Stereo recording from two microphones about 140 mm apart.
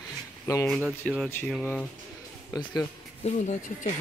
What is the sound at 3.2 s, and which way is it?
Speech, 60° left (ahead or behind).